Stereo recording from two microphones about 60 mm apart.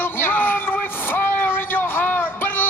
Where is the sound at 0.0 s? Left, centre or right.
Left.